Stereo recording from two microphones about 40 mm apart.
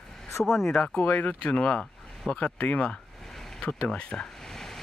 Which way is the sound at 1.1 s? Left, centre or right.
Left.